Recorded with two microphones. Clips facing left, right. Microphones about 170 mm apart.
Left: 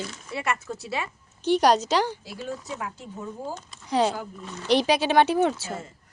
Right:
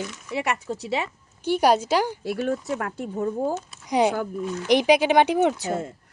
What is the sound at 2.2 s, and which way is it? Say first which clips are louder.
Speech: right 9 dB; 60° right (ahead or behind).